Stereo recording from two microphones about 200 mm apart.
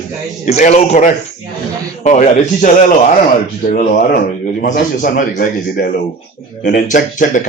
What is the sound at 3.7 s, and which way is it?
A man's voice, 40° left (ahead or behind).